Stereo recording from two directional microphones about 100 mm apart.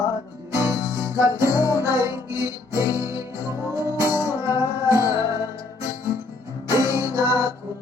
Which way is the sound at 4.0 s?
35° left (ahead or behind).